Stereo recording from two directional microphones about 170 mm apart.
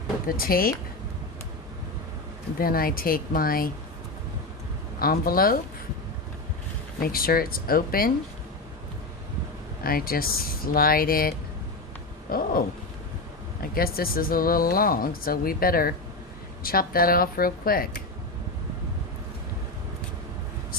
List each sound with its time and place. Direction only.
0.3 s speech: 60° left (ahead or behind)
2.6 s speech: 60° left (ahead or behind)
4.9 s speech: 60° left (ahead or behind)
7.0 s speech: 60° left (ahead or behind)
9.8 s speech: 60° left (ahead or behind)
13.6 s speech: 60° left (ahead or behind)